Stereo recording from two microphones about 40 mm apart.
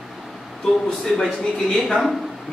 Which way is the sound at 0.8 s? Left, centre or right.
Centre.